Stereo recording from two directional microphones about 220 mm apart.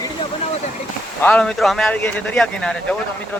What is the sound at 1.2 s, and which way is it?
Speech, 5° left (ahead or behind).